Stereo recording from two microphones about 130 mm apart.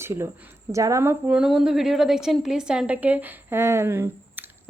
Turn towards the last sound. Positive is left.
turn(degrees=-15)  # may be behind; listen again after turning